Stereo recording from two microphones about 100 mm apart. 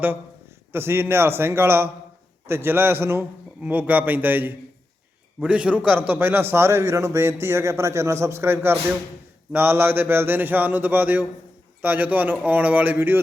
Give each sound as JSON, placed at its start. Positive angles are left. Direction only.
{"t": 0.7, "sound": "a man's voice", "side_deg": -25}